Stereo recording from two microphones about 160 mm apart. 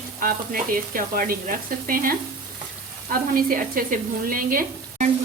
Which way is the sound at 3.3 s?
60° right (ahead or behind).